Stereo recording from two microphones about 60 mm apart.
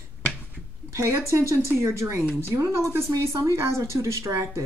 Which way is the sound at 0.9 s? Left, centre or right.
Right.